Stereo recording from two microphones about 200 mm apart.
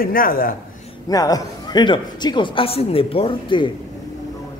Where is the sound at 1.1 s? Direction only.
20° left (ahead or behind).